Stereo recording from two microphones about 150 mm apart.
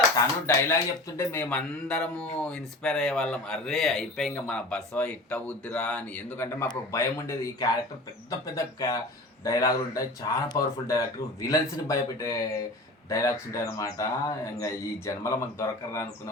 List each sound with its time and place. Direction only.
0.4 s a man's voice: 20° left (ahead or behind)